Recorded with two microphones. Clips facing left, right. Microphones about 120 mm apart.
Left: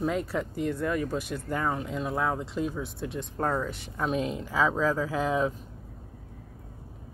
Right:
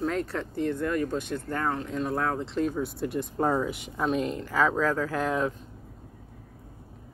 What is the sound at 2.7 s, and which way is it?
Speech, centre (ahead or behind).